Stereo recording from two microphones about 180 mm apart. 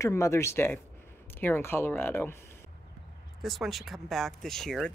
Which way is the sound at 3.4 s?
Centre (ahead or behind).